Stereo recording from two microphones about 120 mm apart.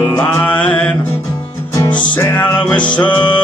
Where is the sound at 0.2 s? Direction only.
15° left (ahead or behind).